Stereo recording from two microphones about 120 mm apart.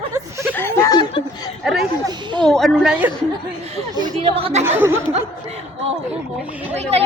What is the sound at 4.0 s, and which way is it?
Speech, 50° right (ahead or behind).